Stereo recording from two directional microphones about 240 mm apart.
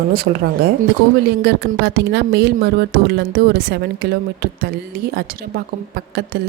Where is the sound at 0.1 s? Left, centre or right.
Right.